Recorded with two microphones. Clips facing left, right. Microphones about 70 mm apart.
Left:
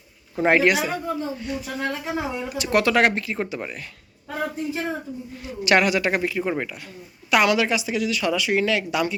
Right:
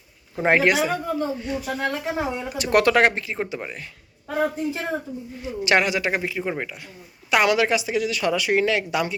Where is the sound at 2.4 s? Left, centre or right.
Right.